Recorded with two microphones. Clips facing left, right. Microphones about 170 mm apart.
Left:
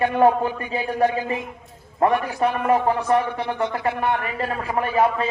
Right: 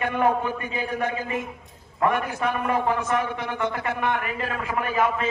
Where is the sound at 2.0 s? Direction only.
35° left (ahead or behind).